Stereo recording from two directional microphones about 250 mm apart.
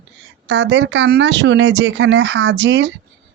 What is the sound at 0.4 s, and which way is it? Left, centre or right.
Speech, right.